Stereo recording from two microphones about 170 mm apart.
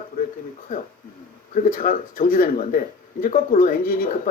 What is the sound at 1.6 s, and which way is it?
Speech, 55° left (ahead or behind).